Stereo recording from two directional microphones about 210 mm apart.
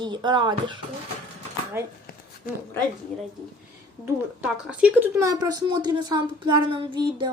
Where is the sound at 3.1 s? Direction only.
5° left (ahead or behind).